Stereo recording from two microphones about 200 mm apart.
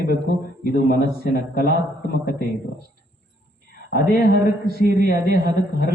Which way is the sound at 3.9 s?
50° left (ahead or behind).